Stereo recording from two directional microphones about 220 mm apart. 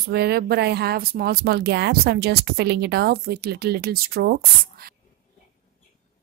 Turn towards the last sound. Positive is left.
turn(degrees=-45)  # may be behind; listen again after turning